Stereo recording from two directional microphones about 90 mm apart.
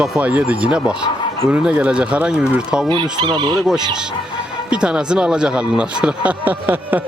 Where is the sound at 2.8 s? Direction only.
60° right (ahead or behind).